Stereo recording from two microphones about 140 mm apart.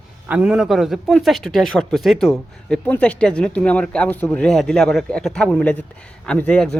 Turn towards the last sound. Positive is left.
turn(degrees=5)  # may be behind; listen again after turning